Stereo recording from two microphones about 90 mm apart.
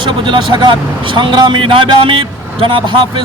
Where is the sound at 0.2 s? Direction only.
70° right (ahead or behind).